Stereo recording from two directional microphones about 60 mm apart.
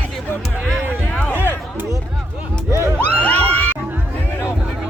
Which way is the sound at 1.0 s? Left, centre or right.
Left.